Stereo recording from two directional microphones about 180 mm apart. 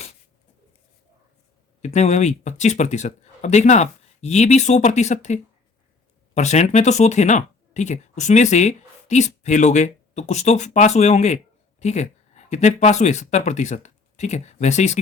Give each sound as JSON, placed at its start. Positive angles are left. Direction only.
{"t": 1.8, "sound": "speech", "side_deg": 40}